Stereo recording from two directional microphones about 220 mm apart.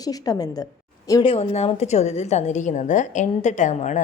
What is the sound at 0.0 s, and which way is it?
A woman's voice, 15° left (ahead or behind).